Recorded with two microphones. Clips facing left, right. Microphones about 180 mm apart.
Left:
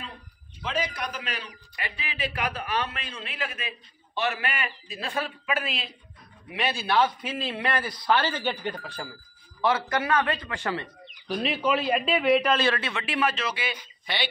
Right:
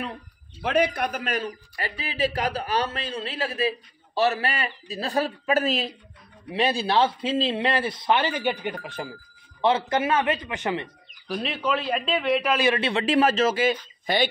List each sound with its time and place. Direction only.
0.6 s a man's voice: 60° right (ahead or behind); by 10.9 s 20° right (ahead or behind)
11.2 s a man's voice: centre (ahead or behind)
12.5 s a man's voice: 15° right (ahead or behind)
12.8 s a man's voice: 35° right (ahead or behind)